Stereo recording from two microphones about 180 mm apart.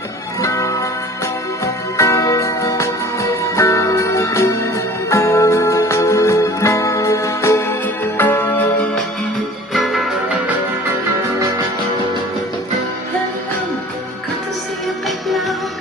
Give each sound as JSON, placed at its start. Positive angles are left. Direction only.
{"t": 0.4, "sound": "music", "side_deg": 15}
{"t": 9.7, "sound": "music", "side_deg": 0}
{"t": 15.0, "sound": "music", "side_deg": 0}